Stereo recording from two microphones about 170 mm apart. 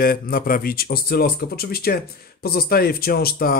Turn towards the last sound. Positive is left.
turn(degrees=60)  # may be behind; listen again after turning